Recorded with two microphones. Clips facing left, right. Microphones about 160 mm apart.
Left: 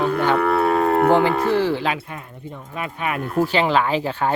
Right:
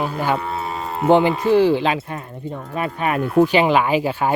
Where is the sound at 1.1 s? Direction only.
20° right (ahead or behind).